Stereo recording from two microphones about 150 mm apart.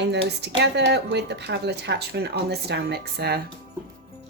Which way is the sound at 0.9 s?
90° right.